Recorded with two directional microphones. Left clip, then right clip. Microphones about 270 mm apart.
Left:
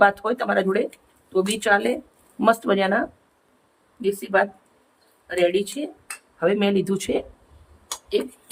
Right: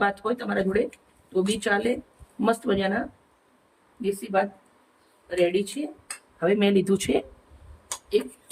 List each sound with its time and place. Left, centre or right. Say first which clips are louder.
0.0 s speech: left 7 dB; centre
4.0 s speech: left 4 dB; centre